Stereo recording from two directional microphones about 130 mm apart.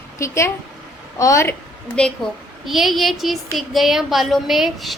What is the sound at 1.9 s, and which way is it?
A woman's voice, 5° left (ahead or behind).